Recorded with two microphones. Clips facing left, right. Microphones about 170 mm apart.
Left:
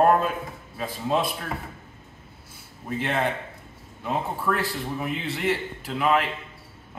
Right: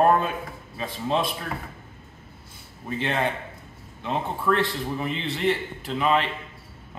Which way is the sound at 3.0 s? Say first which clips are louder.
Even; 5° left (ahead or behind).